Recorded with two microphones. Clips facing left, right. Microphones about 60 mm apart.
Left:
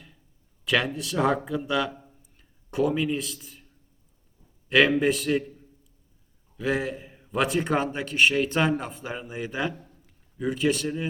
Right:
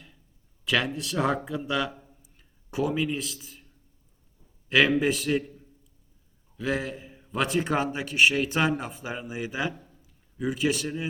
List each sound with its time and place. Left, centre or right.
0.6 s a man's voice: centre
4.7 s a man's voice: centre
6.6 s a man's voice: centre